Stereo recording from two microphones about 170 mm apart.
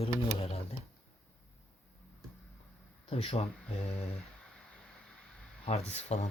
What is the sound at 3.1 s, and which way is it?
Speech, 35° left (ahead or behind).